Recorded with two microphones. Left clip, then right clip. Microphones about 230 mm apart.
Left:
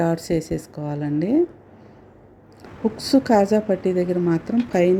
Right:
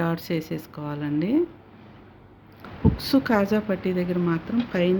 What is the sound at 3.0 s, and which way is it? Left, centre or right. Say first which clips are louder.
Speech: left 6 dB; centre.